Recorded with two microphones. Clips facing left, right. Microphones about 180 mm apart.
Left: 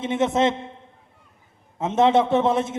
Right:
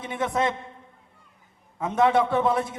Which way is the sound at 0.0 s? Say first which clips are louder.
Left 5 dB; 25° left (ahead or behind).